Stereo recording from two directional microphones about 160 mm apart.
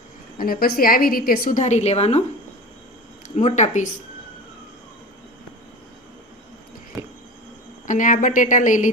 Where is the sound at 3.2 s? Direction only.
45° left (ahead or behind).